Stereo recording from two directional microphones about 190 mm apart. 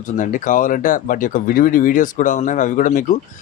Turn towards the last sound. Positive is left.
turn(degrees=45)  # may be behind; listen again after turning